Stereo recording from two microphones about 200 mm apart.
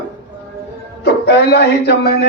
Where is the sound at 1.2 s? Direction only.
55° left (ahead or behind).